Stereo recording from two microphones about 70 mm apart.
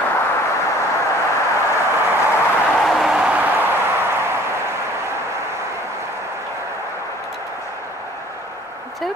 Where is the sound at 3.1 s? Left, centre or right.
Centre.